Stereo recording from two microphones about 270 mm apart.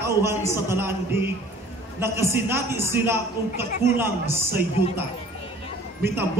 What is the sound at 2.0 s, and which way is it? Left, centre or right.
A woman's voice, centre.